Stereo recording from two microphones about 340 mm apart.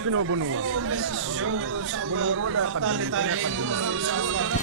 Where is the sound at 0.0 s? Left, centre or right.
Right.